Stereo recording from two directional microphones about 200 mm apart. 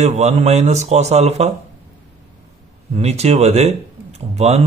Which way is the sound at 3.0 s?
35° right (ahead or behind).